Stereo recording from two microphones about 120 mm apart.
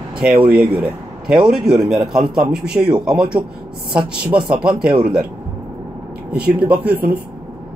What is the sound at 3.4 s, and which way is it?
Speech, 25° right (ahead or behind).